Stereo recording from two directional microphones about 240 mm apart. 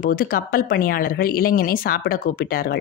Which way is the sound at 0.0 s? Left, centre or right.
Left.